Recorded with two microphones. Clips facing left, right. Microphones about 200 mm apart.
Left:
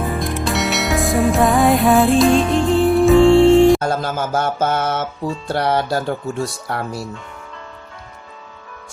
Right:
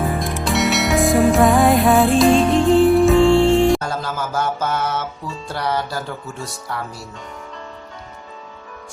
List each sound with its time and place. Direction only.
0.0 s music: centre (ahead or behind)
4.0 s a sound: 25° left (ahead or behind)
4.7 s speech: 55° left (ahead or behind)